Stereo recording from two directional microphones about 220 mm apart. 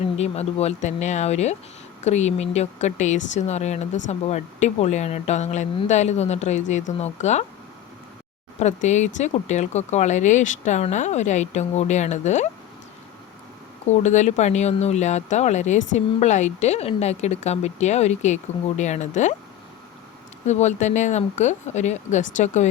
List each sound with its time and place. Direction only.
0.2 s speech: 30° left (ahead or behind)
8.5 s speech: 30° left (ahead or behind)
13.8 s speech: 30° left (ahead or behind)
20.5 s speech: 30° left (ahead or behind)